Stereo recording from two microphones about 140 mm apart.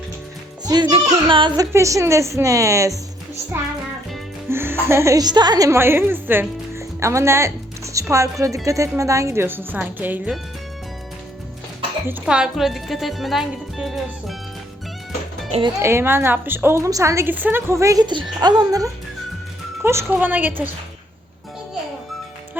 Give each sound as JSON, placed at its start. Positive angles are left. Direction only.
{"t": 0.7, "sound": "a woman's voice", "side_deg": -30}
{"t": 0.9, "sound": "a sound", "side_deg": -40}
{"t": 1.7, "sound": "a woman's voice", "side_deg": -20}
{"t": 4.4, "sound": "a woman's voice", "side_deg": -15}
{"t": 12.2, "sound": "speech", "side_deg": -5}
{"t": 15.8, "sound": "a woman's voice", "side_deg": -20}